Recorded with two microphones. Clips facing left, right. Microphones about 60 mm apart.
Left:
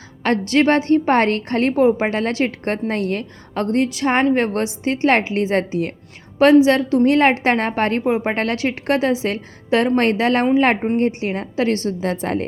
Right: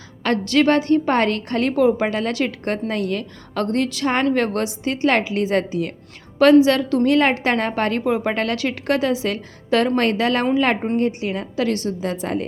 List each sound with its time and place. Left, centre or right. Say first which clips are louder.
0.2 s a woman's voice: left 1 dB; left